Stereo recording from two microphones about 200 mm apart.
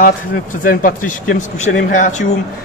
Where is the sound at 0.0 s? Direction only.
45° left (ahead or behind).